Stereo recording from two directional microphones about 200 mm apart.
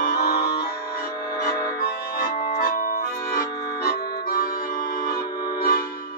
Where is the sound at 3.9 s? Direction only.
50° left (ahead or behind).